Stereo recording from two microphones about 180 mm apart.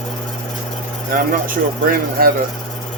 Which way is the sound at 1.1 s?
55° right (ahead or behind).